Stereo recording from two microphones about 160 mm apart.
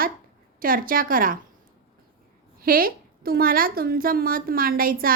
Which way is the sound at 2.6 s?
65° right (ahead or behind).